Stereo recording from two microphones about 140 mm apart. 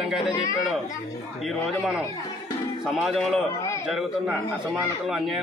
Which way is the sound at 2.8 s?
5° right (ahead or behind).